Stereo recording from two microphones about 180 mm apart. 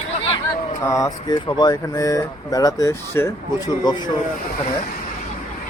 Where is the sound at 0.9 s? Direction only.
20° left (ahead or behind).